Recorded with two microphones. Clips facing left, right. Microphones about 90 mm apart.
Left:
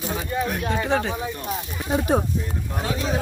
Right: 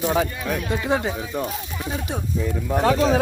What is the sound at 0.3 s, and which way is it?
Speech, 35° left (ahead or behind).